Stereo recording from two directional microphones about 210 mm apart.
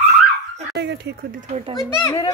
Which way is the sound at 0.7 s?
55° right (ahead or behind).